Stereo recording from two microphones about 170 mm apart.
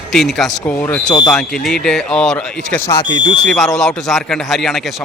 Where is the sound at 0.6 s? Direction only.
10° left (ahead or behind).